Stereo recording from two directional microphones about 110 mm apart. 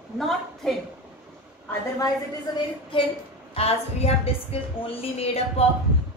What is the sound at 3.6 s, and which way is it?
A woman's voice, 65° left (ahead or behind).